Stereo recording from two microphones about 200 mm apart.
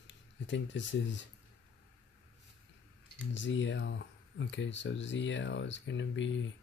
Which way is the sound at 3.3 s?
65° left (ahead or behind).